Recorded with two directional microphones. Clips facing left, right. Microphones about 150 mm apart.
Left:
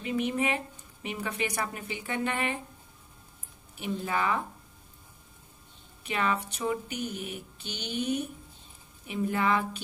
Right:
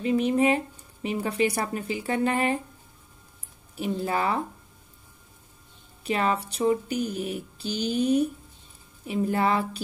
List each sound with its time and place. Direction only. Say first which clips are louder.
0.0 s speech: right 7 dB; 35° right (ahead or behind)
3.8 s speech: right 4 dB; 35° right (ahead or behind)
6.0 s speech: right 4 dB; 35° right (ahead or behind)